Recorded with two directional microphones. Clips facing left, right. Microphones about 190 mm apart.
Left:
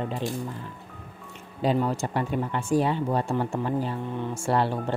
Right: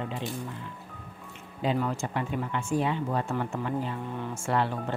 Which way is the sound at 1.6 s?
35° left (ahead or behind).